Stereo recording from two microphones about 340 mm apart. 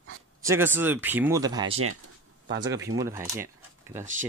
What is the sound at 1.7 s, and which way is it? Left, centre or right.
Speech, right.